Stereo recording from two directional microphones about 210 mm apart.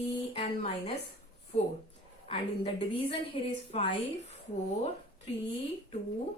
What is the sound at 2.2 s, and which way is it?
A woman's voice, 30° left (ahead or behind).